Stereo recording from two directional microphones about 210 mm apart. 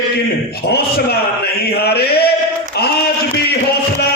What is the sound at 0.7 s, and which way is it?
Speech, 50° left (ahead or behind).